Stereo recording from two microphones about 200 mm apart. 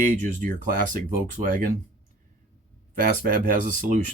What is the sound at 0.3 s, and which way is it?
Speech, 40° right (ahead or behind).